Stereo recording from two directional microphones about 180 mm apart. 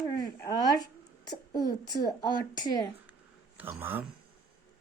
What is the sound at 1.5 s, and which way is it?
A woman's voice, 20° left (ahead or behind).